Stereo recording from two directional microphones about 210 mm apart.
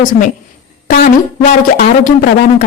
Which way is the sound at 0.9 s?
35° left (ahead or behind).